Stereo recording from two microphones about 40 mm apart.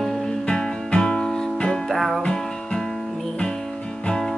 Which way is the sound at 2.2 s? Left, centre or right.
Centre.